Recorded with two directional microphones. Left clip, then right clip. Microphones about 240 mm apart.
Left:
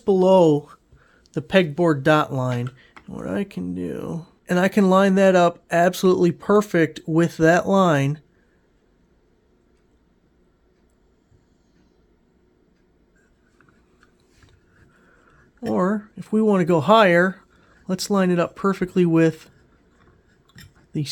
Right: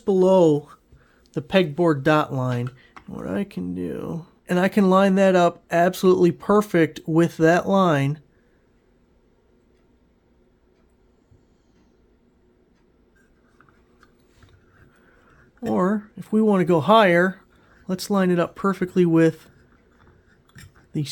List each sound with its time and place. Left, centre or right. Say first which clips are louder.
0.0 s speech: left 1 dB; centre
15.1 s speech: even; centre
20.9 s speech: even; centre